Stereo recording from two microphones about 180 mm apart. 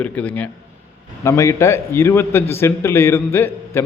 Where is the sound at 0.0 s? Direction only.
10° left (ahead or behind).